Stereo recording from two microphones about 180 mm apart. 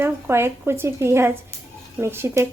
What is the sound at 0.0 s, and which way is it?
A woman's voice, 15° right (ahead or behind).